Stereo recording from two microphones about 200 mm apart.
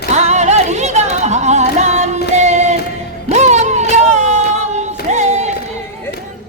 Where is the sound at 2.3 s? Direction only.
35° right (ahead or behind).